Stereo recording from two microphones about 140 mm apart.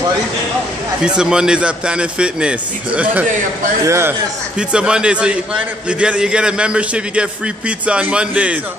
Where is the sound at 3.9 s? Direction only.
20° right (ahead or behind).